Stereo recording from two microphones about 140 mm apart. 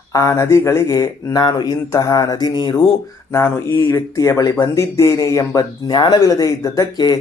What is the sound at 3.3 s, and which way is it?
Speech, 20° left (ahead or behind).